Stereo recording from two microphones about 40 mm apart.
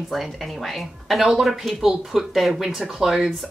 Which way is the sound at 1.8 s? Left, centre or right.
Centre.